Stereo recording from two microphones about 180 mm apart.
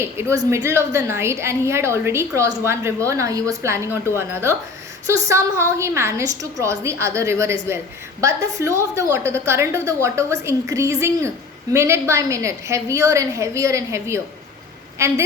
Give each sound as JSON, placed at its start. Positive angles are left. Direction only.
{"t": 0.0, "sound": "a woman's voice", "side_deg": -15}